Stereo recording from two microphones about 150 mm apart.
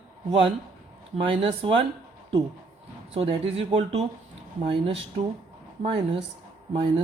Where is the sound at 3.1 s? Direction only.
40° right (ahead or behind).